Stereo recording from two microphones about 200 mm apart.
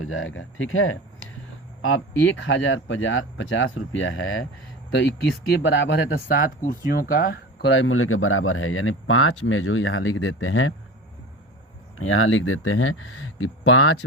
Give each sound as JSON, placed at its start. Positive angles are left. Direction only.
{"t": 0.0, "sound": "speech", "side_deg": 90}
{"t": 4.9, "sound": "speech", "side_deg": 60}
{"t": 7.7, "sound": "speech", "side_deg": 85}
{"t": 12.0, "sound": "speech", "side_deg": 90}